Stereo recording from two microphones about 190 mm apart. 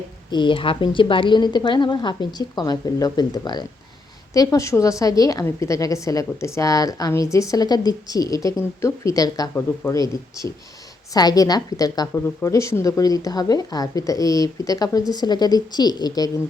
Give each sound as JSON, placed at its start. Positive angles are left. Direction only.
{"t": 0.3, "sound": "a woman's voice", "side_deg": 25}